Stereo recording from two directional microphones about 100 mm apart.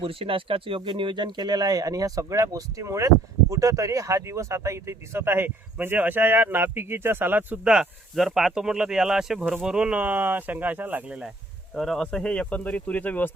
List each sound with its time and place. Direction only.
0.0 s speech: 70° right (ahead or behind); by 11.2 s 15° right (ahead or behind)
11.7 s speech: 5° left (ahead or behind)